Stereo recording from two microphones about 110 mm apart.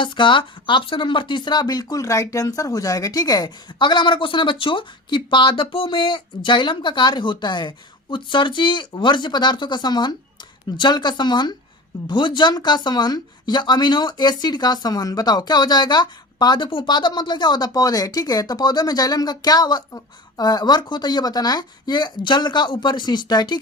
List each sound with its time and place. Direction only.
0.0 s speech: 50° left (ahead or behind)